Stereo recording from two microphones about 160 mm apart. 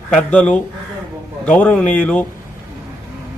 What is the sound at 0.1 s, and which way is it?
A man's voice, 10° left (ahead or behind).